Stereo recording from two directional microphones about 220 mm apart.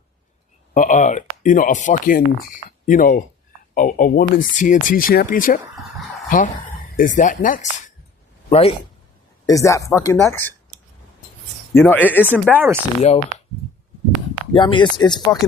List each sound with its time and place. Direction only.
0.7 s speech: 35° left (ahead or behind)
6.9 s a man's voice: 35° left (ahead or behind)
9.5 s speech: 15° left (ahead or behind)
11.7 s speech: 10° left (ahead or behind)
12.2 s speech: 10° right (ahead or behind)
13.0 s speech: 30° left (ahead or behind)
14.5 s speech: 20° left (ahead or behind)